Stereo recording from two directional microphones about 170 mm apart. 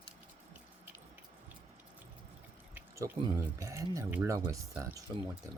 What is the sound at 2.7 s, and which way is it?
Drip, 10° right (ahead or behind).